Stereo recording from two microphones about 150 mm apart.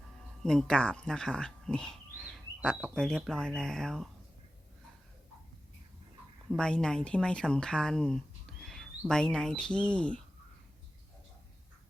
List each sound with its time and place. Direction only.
0.4 s speech: 5° left (ahead or behind)
6.6 s speech: 5° left (ahead or behind)